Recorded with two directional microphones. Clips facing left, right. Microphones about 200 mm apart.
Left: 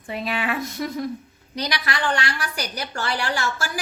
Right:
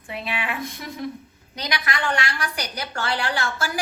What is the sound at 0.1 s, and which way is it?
Speech, 40° left (ahead or behind).